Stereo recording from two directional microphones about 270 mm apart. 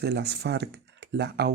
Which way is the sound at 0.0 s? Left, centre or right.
Right.